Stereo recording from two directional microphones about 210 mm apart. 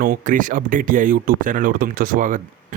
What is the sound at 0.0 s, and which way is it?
A man's voice, 40° right (ahead or behind).